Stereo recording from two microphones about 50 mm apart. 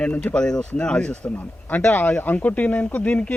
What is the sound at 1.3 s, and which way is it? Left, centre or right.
Speech, left.